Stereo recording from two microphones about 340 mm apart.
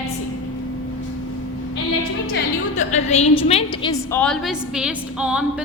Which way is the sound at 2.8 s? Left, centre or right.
Centre.